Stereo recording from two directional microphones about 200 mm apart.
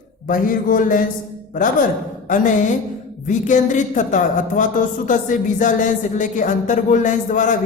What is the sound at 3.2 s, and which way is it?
Speech, 40° left (ahead or behind).